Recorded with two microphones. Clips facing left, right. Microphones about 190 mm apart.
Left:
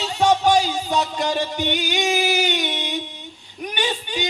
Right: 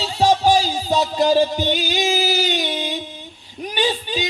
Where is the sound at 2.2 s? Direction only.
60° left (ahead or behind).